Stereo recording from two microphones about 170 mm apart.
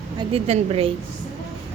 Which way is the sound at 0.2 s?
35° right (ahead or behind).